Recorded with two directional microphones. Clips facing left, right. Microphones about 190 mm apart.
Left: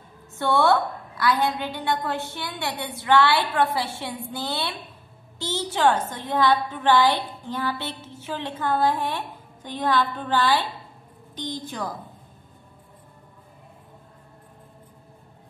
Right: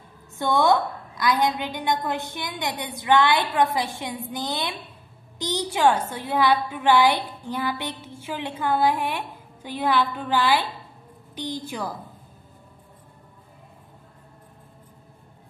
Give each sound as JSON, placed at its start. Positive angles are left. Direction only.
{"t": 0.3, "sound": "a woman's voice", "side_deg": -15}